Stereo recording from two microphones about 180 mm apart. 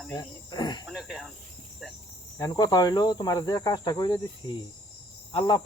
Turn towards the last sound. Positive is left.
turn(degrees=25)  # may be behind; listen again after turning